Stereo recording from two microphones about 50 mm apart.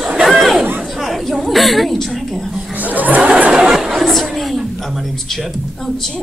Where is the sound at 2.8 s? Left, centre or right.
Right.